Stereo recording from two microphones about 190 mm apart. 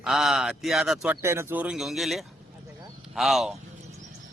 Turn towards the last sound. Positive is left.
turn(degrees=0)  # may be behind; listen again after turning